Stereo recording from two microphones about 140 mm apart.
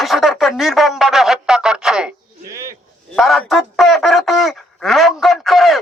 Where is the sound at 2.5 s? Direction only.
20° right (ahead or behind).